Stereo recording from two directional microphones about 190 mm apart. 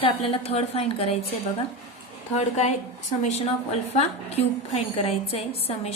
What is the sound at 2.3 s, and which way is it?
Speech, 35° left (ahead or behind).